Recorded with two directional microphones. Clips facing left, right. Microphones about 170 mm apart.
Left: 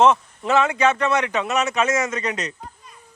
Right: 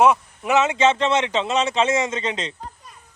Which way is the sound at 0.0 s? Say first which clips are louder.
Even; 15° right (ahead or behind).